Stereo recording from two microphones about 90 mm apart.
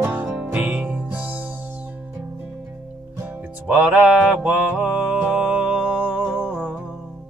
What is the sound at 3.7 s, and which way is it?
Music, 15° right (ahead or behind).